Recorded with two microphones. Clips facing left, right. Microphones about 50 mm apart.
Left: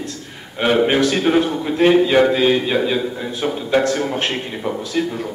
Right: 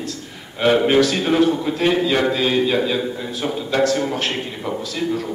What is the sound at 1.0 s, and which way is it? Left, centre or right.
A man's voice, centre.